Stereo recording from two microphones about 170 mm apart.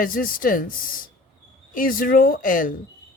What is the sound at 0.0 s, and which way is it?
Speech, 55° left (ahead or behind).